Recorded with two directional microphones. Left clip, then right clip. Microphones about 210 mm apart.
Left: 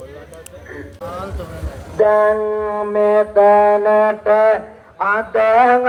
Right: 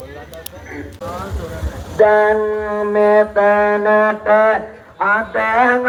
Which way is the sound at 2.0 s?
30° left (ahead or behind).